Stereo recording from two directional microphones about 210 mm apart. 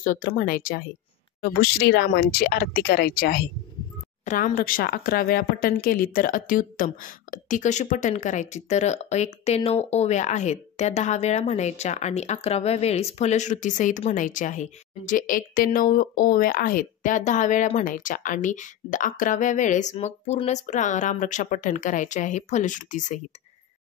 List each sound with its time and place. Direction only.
0.0 s a woman's voice: 40° left (ahead or behind)
4.2 s a woman's voice: 35° left (ahead or behind)